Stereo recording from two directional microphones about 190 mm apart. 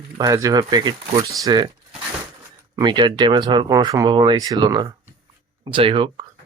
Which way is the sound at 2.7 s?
25° right (ahead or behind).